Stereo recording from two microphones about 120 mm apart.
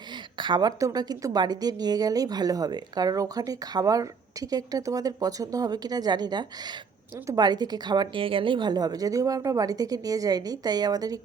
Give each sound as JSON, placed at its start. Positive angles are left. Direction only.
{"t": 0.3, "sound": "a woman's voice", "side_deg": -40}